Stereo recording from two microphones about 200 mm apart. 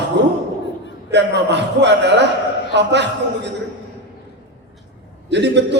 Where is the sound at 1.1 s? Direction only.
60° right (ahead or behind).